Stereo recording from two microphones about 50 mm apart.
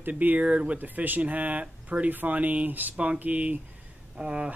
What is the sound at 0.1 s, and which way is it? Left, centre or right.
Speech, right.